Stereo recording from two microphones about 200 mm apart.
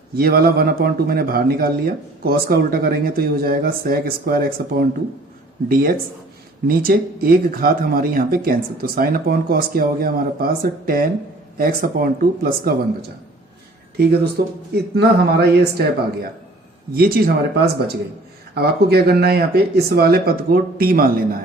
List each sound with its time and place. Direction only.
0.1 s a man's voice: 50° right (ahead or behind)
18.5 s a man's voice: 50° right (ahead or behind)